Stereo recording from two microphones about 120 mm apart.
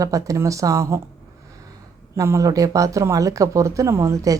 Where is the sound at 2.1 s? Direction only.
25° right (ahead or behind).